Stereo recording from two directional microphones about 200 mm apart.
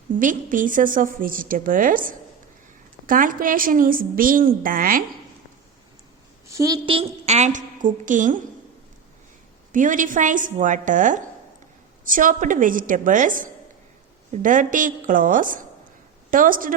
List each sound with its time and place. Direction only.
0.2 s a woman's voice: 40° right (ahead or behind)
6.5 s a woman's voice: 15° right (ahead or behind)
6.8 s a woman's voice: 30° right (ahead or behind)
9.7 s a woman's voice: 40° right (ahead or behind)